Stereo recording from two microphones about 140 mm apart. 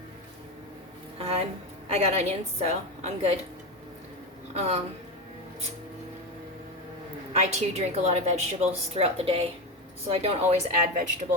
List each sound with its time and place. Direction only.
1.2 s a woman's voice: 45° right (ahead or behind)
4.5 s a woman's voice: 50° right (ahead or behind)
7.3 s a woman's voice: 55° right (ahead or behind)